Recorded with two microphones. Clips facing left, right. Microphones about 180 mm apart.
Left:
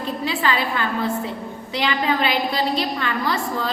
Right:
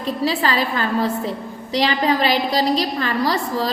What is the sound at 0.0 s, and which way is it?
A woman's voice, 35° right (ahead or behind).